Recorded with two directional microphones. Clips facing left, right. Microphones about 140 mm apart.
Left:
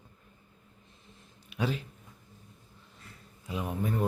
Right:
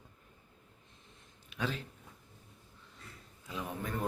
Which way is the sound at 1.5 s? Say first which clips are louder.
Left 5 dB; 10° left (ahead or behind).